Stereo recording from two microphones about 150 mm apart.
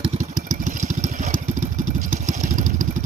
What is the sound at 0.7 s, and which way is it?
Vehicle, 55° right (ahead or behind).